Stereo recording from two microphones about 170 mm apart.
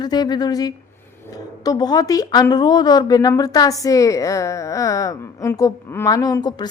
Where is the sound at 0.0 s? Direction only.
25° left (ahead or behind).